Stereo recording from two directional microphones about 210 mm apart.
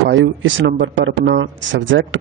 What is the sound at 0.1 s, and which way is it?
Speech, 60° right (ahead or behind).